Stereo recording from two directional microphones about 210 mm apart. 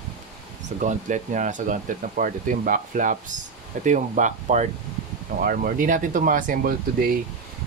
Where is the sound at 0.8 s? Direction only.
35° right (ahead or behind).